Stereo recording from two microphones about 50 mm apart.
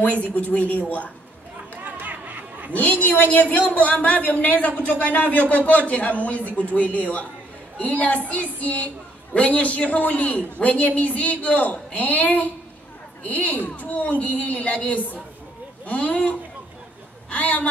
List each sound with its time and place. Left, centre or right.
0.3 s speech: left
1.8 s a sound: right
2.7 s a woman's voice: left